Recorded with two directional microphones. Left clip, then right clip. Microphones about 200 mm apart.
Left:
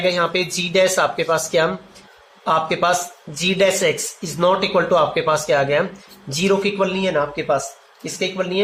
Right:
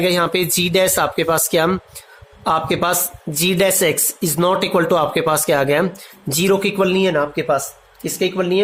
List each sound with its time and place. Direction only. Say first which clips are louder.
0.0 s speech: right 2 dB; 50° right (ahead or behind)